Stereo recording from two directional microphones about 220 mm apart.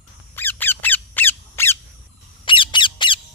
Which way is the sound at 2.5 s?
20° left (ahead or behind).